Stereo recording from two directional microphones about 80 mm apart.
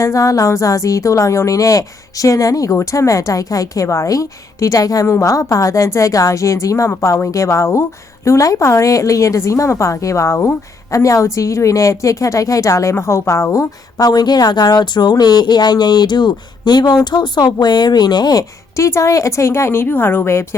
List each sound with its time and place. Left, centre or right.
0.0 s a woman's voice: left
14.1 s speech: left
18.8 s a woman's voice: left